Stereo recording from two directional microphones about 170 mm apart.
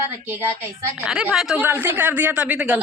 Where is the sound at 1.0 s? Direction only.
5° right (ahead or behind).